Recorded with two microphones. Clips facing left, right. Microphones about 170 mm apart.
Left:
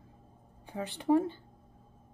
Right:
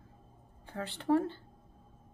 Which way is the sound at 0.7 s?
15° left (ahead or behind).